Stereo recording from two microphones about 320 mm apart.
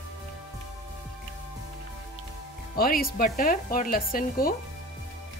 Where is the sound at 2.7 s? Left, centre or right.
Left.